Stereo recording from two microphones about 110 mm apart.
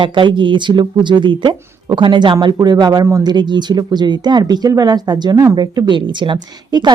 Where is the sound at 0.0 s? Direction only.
45° right (ahead or behind); by 3.3 s 30° right (ahead or behind).